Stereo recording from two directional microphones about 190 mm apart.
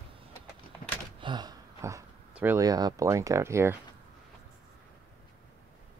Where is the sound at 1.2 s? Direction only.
25° right (ahead or behind).